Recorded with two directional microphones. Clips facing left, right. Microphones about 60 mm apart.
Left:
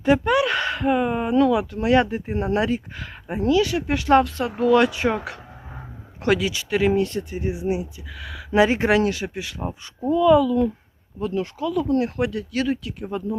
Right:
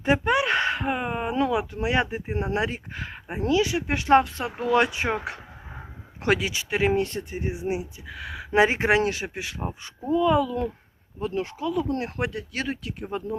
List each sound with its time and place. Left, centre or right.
0.0 s a sound: right
3.2 s speech: right
6.2 s speech: right